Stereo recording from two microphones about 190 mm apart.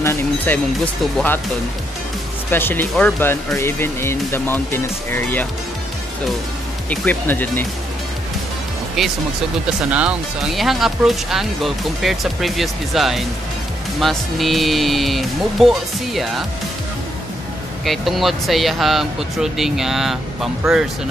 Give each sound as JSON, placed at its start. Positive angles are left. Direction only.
{"t": 0.0, "sound": "speech", "side_deg": 15}
{"t": 2.5, "sound": "speech", "side_deg": 10}
{"t": 6.9, "sound": "speech", "side_deg": 10}
{"t": 9.8, "sound": "speech", "side_deg": -5}
{"t": 17.8, "sound": "speech", "side_deg": 0}